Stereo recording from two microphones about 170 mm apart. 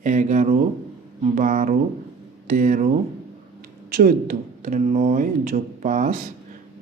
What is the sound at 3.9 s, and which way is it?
Speech, 55° right (ahead or behind).